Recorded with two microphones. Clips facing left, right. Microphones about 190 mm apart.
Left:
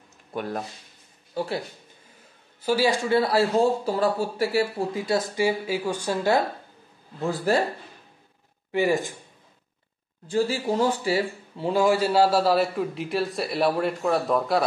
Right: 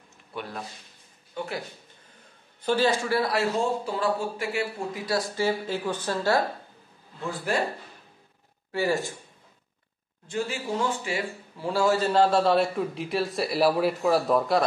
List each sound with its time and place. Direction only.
0.3 s speech: 45° left (ahead or behind)
1.3 s speech: 35° left (ahead or behind)
2.6 s a man's voice: 10° left (ahead or behind)
7.5 s speech: 35° left (ahead or behind)
8.7 s speech: 15° left (ahead or behind)
10.2 s speech: 35° left (ahead or behind)
11.6 s a man's voice: 15° left (ahead or behind); by 14.6 s centre (ahead or behind)